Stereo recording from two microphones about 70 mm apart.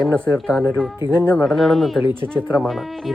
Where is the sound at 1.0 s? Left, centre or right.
Right.